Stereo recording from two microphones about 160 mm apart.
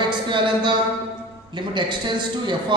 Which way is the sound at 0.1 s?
30° right (ahead or behind).